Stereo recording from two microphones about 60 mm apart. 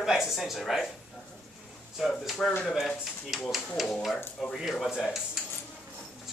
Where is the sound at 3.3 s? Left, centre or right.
Centre.